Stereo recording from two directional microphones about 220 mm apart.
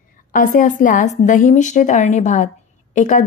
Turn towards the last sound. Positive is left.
turn(degrees=35)  # may be behind; listen again after turning